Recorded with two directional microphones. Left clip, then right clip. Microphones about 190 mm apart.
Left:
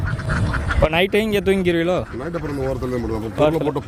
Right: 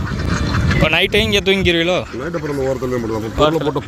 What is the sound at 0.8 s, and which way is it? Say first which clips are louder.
Speech: right 3 dB; 10° left (ahead or behind).